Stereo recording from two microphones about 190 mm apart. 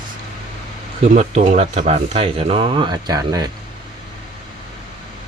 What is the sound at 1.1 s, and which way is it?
Speech, 40° right (ahead or behind).